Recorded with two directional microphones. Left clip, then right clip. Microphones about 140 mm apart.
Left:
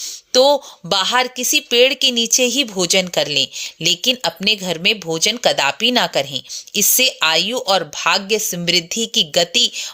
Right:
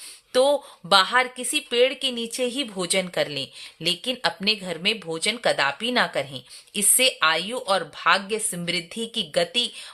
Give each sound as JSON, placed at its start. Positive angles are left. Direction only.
{"t": 0.0, "sound": "a woman's voice", "side_deg": 30}